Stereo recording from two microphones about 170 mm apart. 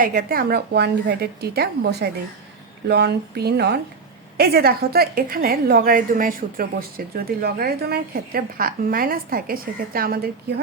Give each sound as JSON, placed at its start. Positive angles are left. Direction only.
{"t": 0.0, "sound": "a woman's voice", "side_deg": -60}